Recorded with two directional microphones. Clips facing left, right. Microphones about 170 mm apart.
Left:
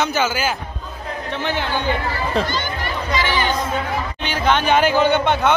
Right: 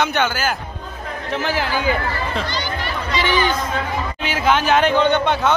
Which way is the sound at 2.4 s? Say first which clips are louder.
Left 2 dB; 45° left (ahead or behind).